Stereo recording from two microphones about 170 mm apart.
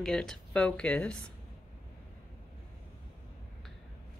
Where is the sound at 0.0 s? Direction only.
5° left (ahead or behind).